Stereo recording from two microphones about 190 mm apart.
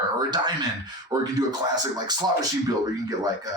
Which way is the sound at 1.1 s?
15° right (ahead or behind).